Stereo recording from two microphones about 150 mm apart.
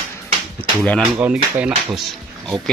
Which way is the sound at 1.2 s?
5° right (ahead or behind).